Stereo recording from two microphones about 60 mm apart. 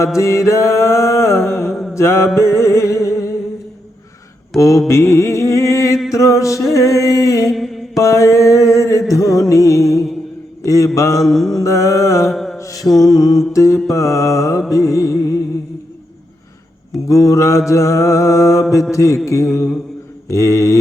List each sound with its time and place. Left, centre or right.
0.2 s music: left
4.5 s mantra: centre
4.9 s music: left
7.5 s mantra: centre
7.9 s music: left
11.2 s mantra: centre
11.6 s music: left
12.3 s mantra: centre
12.5 s mantra: left
13.1 s music: left
13.5 s music: left
17.1 s music: left